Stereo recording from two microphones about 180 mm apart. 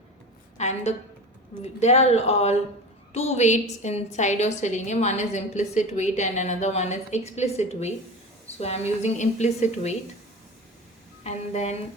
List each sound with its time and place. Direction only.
0.5 s a woman's voice: 40° left (ahead or behind)
11.2 s a woman's voice: 35° left (ahead or behind)